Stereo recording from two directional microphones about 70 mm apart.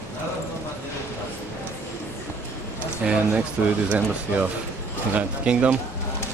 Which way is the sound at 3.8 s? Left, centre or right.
Right.